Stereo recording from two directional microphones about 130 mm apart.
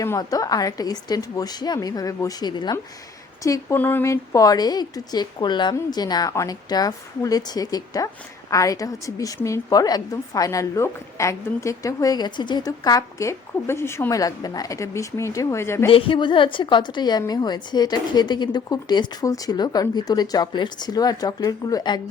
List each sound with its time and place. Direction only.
0.0 s a woman's voice: 25° left (ahead or behind)
3.8 s a woman's voice: 15° left (ahead or behind)
15.9 s a woman's voice: 45° left (ahead or behind)